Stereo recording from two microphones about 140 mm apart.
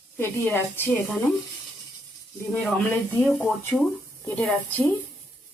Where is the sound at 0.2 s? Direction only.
15° left (ahead or behind).